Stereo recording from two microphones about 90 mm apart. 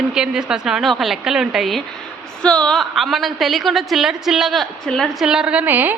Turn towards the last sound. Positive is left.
turn(degrees=-20)  # may be behind; listen again after turning